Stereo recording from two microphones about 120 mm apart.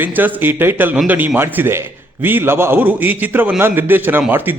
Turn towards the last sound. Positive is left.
turn(degrees=-15)  # may be behind; listen again after turning